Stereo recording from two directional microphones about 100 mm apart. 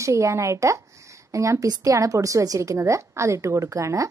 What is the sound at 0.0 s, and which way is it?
A woman's voice, 30° right (ahead or behind).